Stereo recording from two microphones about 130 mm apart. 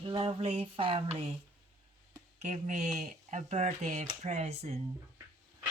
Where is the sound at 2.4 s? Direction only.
60° right (ahead or behind).